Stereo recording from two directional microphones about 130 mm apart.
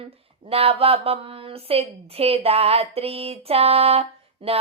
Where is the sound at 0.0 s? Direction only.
45° right (ahead or behind).